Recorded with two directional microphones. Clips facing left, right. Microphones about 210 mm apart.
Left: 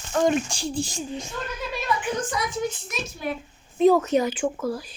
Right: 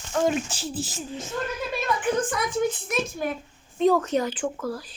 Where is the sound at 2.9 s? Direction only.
50° right (ahead or behind).